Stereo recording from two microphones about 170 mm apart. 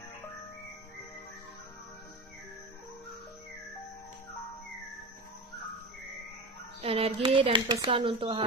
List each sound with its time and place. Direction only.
6.8 s speech: 35° right (ahead or behind)